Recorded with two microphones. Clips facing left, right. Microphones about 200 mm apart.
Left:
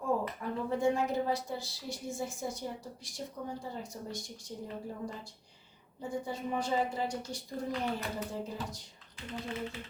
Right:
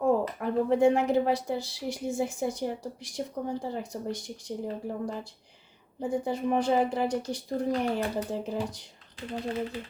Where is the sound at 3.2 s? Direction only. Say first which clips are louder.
Right 8 dB; 65° right (ahead or behind).